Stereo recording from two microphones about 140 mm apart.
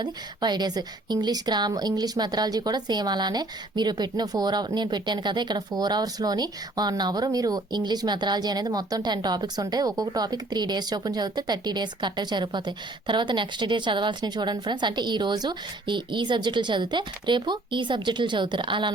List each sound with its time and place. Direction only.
0.0 s a woman's voice: 30° right (ahead or behind)